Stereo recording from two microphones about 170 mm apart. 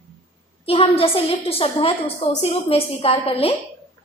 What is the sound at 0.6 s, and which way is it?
A woman's voice, 35° left (ahead or behind).